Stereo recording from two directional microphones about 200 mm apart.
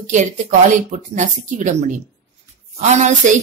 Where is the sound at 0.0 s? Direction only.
40° right (ahead or behind).